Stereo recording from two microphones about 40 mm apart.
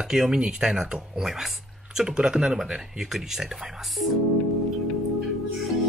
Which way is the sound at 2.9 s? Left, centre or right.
Centre.